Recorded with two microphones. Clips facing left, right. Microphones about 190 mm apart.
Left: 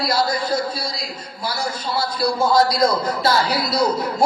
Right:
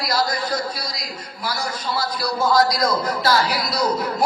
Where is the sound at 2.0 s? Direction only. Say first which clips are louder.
Left 4 dB; 25° left (ahead or behind).